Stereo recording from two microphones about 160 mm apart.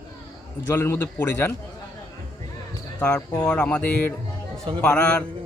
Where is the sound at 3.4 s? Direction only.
5° left (ahead or behind).